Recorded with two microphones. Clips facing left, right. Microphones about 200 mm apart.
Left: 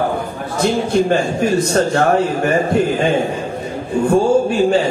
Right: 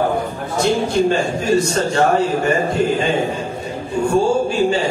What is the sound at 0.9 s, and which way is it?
A man's voice, 60° left (ahead or behind).